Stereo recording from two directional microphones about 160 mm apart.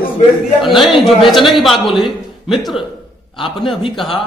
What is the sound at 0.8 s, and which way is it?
A man's voice, centre (ahead or behind).